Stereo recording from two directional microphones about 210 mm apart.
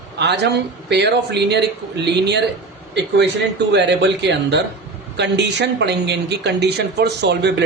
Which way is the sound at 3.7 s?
55° right (ahead or behind).